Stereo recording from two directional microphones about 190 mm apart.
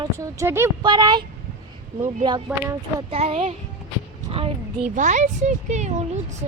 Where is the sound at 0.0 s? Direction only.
15° right (ahead or behind).